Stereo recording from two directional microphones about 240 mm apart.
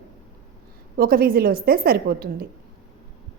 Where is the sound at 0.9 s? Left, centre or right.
Right.